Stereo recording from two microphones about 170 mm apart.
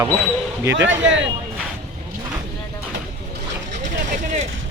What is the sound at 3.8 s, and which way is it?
Vehicle, 45° right (ahead or behind).